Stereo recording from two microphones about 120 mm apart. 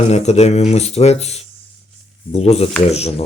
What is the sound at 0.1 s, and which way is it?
Speech, 65° left (ahead or behind).